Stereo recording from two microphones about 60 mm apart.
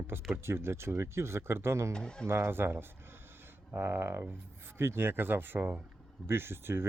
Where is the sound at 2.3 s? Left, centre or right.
Right.